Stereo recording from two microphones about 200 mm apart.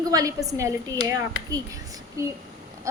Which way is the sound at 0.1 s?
20° right (ahead or behind).